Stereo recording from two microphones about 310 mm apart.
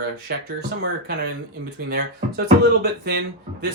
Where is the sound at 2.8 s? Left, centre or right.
Right.